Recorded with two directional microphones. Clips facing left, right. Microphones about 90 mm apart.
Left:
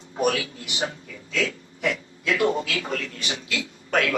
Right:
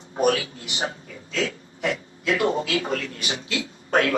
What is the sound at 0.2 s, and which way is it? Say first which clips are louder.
A man's voice: right 2 dB; 30° right (ahead or behind).